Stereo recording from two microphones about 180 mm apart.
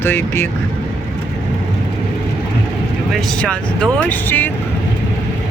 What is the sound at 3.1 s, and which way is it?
Speech, 5° left (ahead or behind).